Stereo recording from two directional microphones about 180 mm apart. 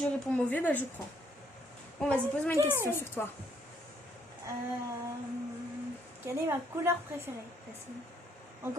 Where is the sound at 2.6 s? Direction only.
15° right (ahead or behind).